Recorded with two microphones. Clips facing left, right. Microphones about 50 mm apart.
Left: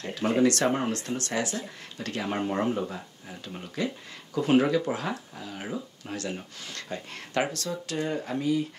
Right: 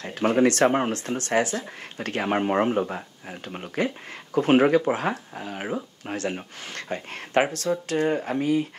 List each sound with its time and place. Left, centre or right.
0.0 s speech: right